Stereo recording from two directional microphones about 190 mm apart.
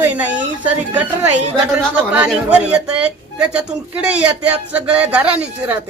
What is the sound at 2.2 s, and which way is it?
Speech, 5° right (ahead or behind).